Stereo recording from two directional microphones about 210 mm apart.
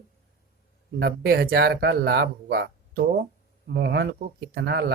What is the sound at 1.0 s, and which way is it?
Speech, 45° right (ahead or behind).